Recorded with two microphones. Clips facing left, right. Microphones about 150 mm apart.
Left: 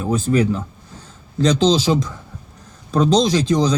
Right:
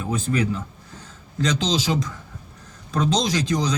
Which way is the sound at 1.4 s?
35° left (ahead or behind).